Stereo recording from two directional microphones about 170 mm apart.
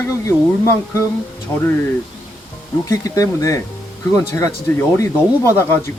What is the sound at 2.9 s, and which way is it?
Speech, 20° left (ahead or behind).